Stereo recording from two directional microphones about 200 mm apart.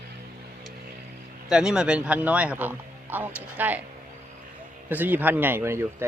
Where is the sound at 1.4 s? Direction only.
5° right (ahead or behind).